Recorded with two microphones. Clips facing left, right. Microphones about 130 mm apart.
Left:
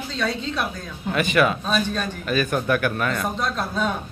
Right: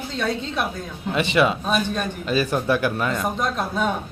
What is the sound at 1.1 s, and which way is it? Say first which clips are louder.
A man's voice: even; 25° right (ahead or behind).